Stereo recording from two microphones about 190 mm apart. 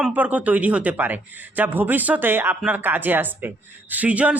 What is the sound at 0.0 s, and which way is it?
A man's voice, 10° right (ahead or behind).